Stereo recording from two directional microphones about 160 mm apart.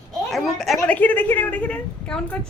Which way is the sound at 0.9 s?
10° left (ahead or behind).